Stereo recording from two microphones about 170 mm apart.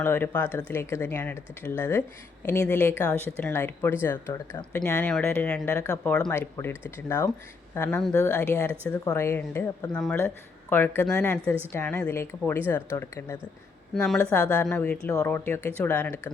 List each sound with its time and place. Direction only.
0.0 s speech: 10° left (ahead or behind)
13.9 s speech: centre (ahead or behind)